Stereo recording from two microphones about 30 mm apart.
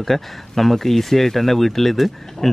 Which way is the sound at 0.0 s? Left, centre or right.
Centre.